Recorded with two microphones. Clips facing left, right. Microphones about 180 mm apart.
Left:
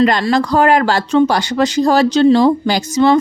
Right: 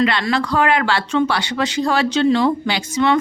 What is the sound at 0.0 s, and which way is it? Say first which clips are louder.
Speech: left 5 dB; 40° left (ahead or behind).